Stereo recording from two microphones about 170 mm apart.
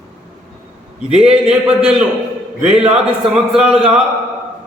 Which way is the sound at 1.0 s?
5° right (ahead or behind).